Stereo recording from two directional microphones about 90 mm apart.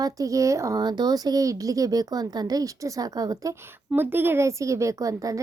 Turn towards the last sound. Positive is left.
turn(degrees=-40)  # may be behind; listen again after turning